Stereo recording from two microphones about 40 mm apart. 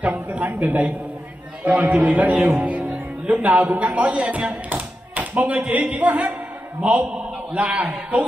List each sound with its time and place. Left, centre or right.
0.0 s a man's voice: right
4.6 s tap: right
6.8 s a man's voice: right